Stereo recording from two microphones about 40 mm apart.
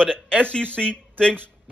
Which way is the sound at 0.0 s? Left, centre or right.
Left.